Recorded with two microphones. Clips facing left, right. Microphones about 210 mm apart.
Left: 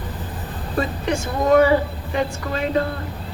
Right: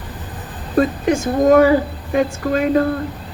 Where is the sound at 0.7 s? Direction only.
50° right (ahead or behind).